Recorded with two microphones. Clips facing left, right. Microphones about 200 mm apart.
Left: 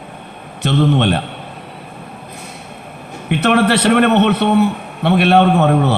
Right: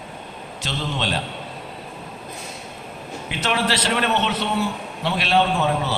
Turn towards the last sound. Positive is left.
turn(degrees=60)  # may be behind; listen again after turning